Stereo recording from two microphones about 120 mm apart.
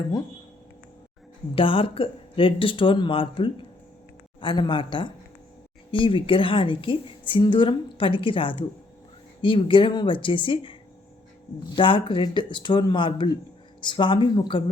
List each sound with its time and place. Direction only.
1.5 s a woman's voice: 50° left (ahead or behind)